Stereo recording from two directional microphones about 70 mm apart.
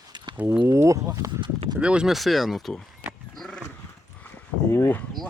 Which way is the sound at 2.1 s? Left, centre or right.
Centre.